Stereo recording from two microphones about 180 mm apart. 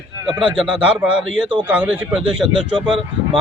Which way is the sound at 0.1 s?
20° right (ahead or behind).